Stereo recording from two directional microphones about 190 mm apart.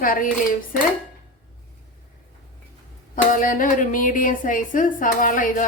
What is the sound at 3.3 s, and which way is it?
Speech, 45° left (ahead or behind).